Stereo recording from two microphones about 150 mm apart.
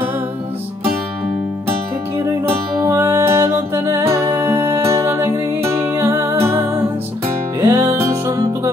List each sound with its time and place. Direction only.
2.1 s music: 20° right (ahead or behind)